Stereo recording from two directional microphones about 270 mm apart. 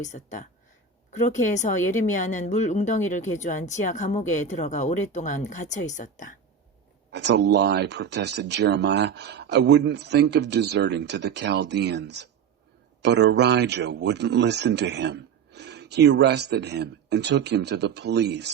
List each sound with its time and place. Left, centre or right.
0.0 s a woman's voice: left
7.1 s speech: right